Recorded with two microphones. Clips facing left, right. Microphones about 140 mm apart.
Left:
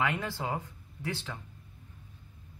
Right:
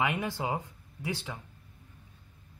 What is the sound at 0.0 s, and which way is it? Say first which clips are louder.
Speech: right 1 dB; 15° right (ahead or behind).